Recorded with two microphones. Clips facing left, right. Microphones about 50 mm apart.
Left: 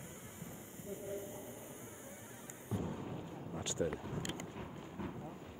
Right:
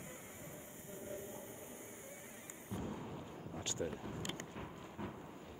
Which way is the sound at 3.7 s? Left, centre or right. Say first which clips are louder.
Left 4 dB; left.